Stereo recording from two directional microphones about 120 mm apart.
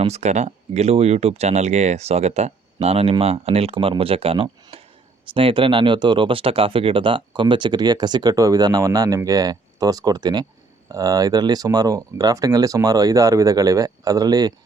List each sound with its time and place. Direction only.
0.0 s speech: 65° right (ahead or behind)
2.8 s speech: 55° right (ahead or behind); by 14.5 s 35° right (ahead or behind)